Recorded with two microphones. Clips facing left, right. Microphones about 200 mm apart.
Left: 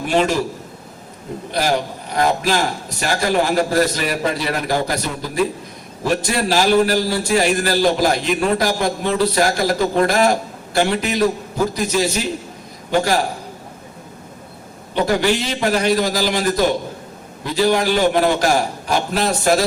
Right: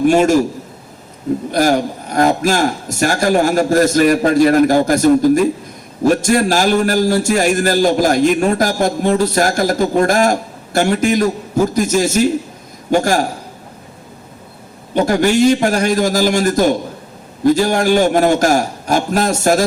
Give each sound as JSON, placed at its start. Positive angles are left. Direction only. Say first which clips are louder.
{"t": 0.0, "sound": "a man's voice", "louder": "right 6 dB", "side_deg": -45}
{"t": 1.5, "sound": "a man's voice", "louder": "right 4 dB", "side_deg": -45}
{"t": 14.9, "sound": "a man's voice", "louder": "right 5 dB", "side_deg": -45}